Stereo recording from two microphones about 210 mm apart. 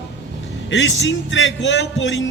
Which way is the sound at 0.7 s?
65° left (ahead or behind).